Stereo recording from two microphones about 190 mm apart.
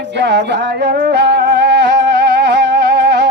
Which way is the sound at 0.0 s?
65° right (ahead or behind).